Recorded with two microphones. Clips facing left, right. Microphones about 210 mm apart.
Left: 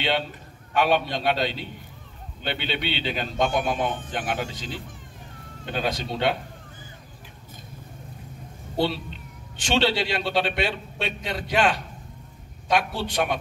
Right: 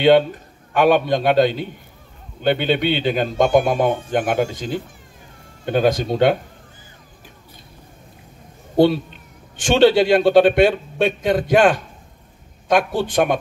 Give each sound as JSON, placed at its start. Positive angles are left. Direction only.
{"t": 0.0, "sound": "speech", "side_deg": -50}
{"t": 8.7, "sound": "a man's voice", "side_deg": -50}